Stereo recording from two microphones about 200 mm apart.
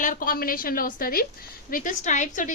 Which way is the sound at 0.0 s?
45° left (ahead or behind).